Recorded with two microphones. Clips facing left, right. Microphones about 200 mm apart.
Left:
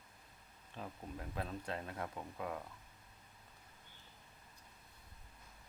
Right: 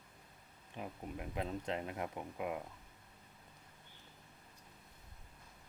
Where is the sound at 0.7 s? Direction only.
15° right (ahead or behind).